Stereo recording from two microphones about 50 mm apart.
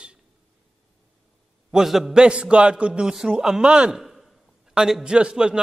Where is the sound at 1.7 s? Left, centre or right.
Centre.